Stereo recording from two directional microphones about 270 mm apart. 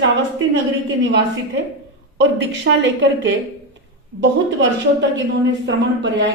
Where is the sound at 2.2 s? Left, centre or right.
Right.